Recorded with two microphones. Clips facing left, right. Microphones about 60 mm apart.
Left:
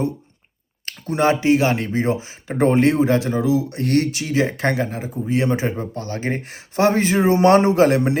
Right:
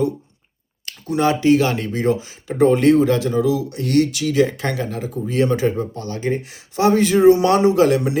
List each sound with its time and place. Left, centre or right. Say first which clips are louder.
0.9 s speech: even; left